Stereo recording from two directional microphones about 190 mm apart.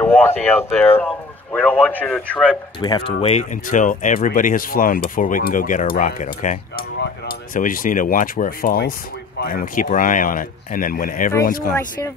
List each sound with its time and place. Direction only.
0.0 s speech: 10° left (ahead or behind)
2.8 s speech: 25° left (ahead or behind); by 11.7 s 45° left (ahead or behind)